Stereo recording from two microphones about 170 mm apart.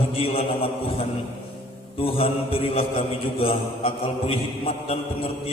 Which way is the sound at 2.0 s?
35° left (ahead or behind).